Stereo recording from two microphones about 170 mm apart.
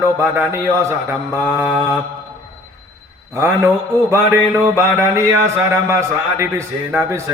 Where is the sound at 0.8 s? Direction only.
15° right (ahead or behind).